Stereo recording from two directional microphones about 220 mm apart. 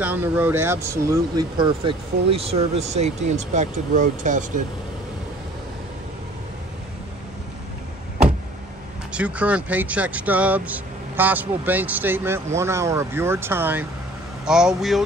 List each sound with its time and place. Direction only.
0.0 s speech: 10° right (ahead or behind); by 4.5 s 35° right (ahead or behind)
9.1 s speech: 5° right (ahead or behind)